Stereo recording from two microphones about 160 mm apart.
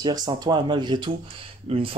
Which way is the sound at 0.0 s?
25° right (ahead or behind).